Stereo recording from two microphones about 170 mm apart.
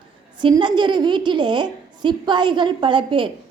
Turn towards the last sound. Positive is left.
turn(degrees=-30)  # may be behind; listen again after turning